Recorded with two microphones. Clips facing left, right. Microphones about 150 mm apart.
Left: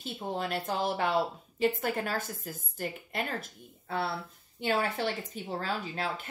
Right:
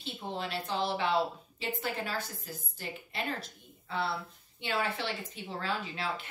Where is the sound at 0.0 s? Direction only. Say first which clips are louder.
Left 3 dB; 45° left (ahead or behind).